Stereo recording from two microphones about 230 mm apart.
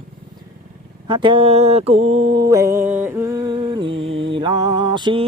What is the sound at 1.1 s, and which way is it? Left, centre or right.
Mantra, right.